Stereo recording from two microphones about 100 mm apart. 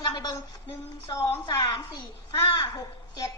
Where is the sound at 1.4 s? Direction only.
40° left (ahead or behind).